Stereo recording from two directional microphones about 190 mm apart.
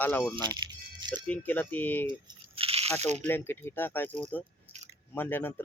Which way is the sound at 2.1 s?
25° right (ahead or behind).